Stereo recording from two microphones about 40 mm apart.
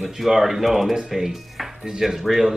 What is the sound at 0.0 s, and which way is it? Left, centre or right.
Speech, centre.